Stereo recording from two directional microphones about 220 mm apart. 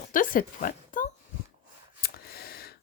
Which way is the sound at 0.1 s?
40° left (ahead or behind).